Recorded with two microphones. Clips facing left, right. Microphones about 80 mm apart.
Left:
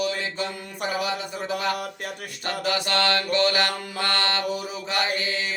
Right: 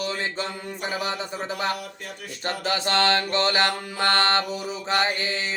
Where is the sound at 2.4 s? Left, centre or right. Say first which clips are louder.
Even; right.